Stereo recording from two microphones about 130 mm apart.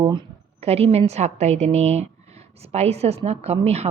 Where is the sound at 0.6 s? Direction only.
55° right (ahead or behind).